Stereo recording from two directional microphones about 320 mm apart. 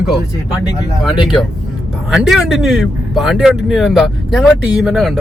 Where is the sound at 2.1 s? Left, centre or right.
Centre.